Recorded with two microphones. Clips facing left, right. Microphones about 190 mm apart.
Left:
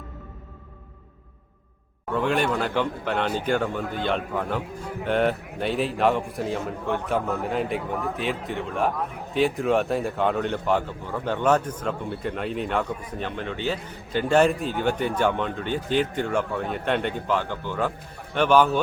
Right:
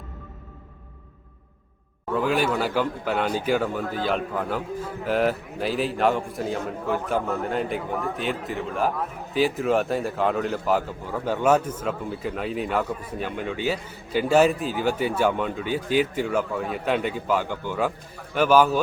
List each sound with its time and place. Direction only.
2.1 s a man's voice: 5° right (ahead or behind)